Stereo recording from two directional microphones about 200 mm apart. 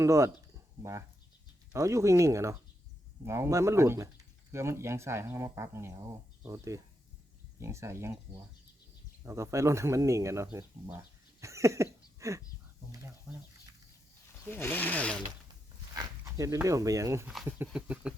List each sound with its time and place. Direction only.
0.0 s speech: 15° right (ahead or behind)
1.7 s speech: 15° right (ahead or behind)
12.9 s a sound: 15° right (ahead or behind)
14.5 s speech: 10° left (ahead or behind)
16.0 s speech: 15° right (ahead or behind)
17.7 s a sound: 5° right (ahead or behind)